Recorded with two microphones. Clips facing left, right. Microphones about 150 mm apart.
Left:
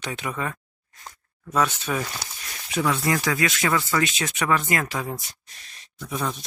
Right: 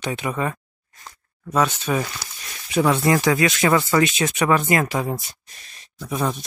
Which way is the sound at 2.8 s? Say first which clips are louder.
Right 5 dB; 35° right (ahead or behind).